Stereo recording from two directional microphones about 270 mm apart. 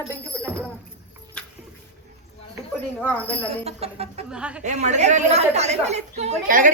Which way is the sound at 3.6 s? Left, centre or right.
Right.